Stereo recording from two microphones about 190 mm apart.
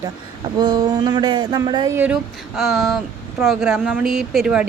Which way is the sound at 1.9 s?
5° right (ahead or behind).